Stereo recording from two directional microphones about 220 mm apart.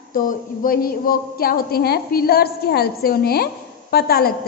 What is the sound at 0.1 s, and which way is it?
A woman's voice, 40° left (ahead or behind).